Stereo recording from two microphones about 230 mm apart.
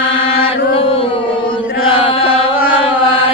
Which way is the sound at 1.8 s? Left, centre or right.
Left.